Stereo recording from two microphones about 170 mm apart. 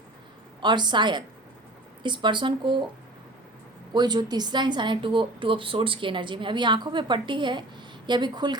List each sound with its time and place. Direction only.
0.6 s a woman's voice: 25° right (ahead or behind)
3.9 s a woman's voice: 25° right (ahead or behind)